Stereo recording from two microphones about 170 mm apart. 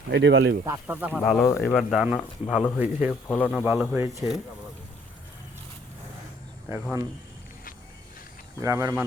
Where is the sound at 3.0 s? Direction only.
10° left (ahead or behind).